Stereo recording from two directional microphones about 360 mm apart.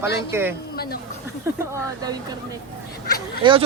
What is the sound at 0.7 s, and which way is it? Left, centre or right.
Speech, left.